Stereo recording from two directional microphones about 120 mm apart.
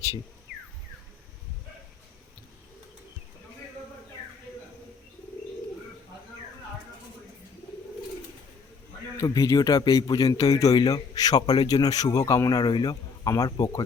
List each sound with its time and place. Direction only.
9.1 s speech: 30° left (ahead or behind)